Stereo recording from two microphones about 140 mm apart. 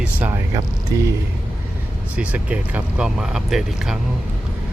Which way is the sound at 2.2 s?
10° right (ahead or behind).